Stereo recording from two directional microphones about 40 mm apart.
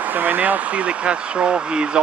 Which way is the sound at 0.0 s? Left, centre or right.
Right.